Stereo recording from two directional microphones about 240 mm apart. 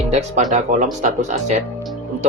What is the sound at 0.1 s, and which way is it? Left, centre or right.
Speech, right.